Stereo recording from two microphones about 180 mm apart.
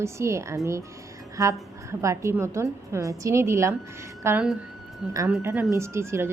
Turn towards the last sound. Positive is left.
turn(degrees=-15)  # may be behind; listen again after turning